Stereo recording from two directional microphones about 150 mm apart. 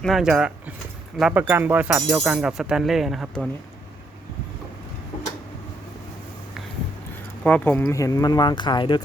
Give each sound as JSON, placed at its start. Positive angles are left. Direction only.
{"t": 0.0, "sound": "speech", "side_deg": 0}
{"t": 7.4, "sound": "speech", "side_deg": 10}